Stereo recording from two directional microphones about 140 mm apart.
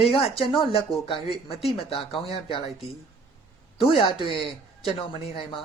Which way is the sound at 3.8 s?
40° left (ahead or behind).